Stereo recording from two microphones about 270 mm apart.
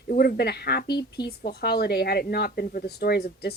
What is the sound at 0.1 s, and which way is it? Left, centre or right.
Speech, left.